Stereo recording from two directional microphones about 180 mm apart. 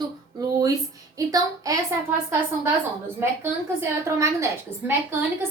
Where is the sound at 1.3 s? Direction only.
20° right (ahead or behind).